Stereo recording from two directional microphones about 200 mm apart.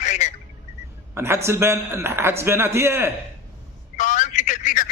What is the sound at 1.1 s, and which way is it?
A man's voice, 10° right (ahead or behind).